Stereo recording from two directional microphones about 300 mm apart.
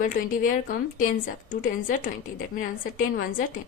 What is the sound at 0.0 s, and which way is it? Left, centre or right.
A woman's voice, left.